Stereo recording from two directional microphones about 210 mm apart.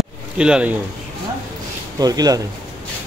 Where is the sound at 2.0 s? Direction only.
20° right (ahead or behind).